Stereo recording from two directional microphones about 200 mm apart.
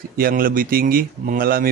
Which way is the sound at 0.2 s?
45° right (ahead or behind).